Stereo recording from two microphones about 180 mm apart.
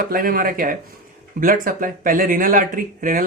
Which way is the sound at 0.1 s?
50° right (ahead or behind).